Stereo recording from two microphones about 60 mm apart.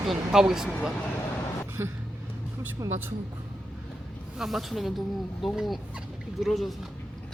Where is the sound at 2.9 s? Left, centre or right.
Right.